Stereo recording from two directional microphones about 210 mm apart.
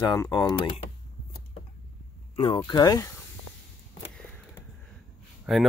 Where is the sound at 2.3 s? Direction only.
25° left (ahead or behind).